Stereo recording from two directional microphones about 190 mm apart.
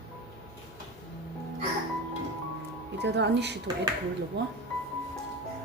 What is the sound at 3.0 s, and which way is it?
A woman's voice, 65° right (ahead or behind).